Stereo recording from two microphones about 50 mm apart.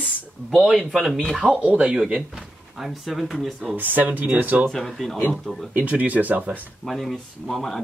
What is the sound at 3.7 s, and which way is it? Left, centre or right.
Speech, right.